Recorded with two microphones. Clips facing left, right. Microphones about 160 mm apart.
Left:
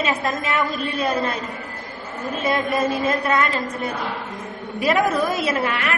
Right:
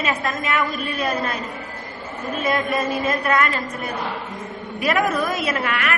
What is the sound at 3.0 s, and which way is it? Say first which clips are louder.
Speech: even; 25° left (ahead or behind).